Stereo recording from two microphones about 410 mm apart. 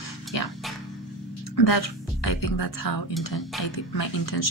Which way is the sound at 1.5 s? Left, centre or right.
Left.